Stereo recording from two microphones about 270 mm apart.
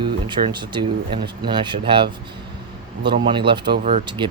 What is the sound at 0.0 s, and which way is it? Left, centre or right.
Speech, centre.